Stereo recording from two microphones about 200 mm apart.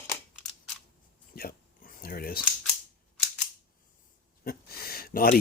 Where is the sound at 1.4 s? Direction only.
45° left (ahead or behind).